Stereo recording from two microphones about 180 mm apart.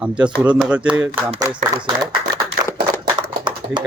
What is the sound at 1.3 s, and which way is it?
Speech, 20° right (ahead or behind).